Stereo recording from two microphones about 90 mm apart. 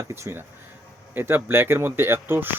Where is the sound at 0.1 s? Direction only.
25° right (ahead or behind).